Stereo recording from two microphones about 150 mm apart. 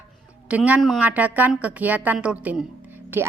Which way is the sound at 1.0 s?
10° right (ahead or behind).